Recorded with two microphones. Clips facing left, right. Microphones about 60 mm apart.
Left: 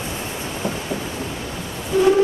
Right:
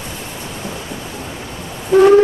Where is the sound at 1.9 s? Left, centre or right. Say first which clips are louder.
Right 9 dB; right.